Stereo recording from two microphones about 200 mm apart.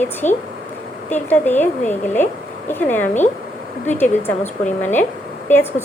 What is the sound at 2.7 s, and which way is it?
A woman's voice, 10° left (ahead or behind).